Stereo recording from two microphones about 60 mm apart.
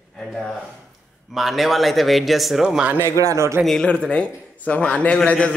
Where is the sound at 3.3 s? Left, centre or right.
Right.